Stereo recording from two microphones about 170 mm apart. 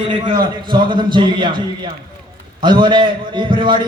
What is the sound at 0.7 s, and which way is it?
Speech, 25° right (ahead or behind).